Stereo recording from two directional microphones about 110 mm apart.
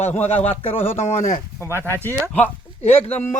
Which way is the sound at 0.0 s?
90° left.